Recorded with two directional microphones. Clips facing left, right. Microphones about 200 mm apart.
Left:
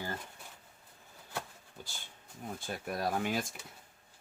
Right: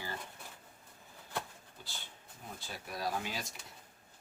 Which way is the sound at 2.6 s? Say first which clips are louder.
Left 4 dB; 50° left (ahead or behind).